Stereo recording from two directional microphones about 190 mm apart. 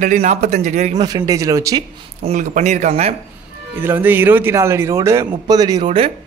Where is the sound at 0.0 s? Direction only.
35° right (ahead or behind).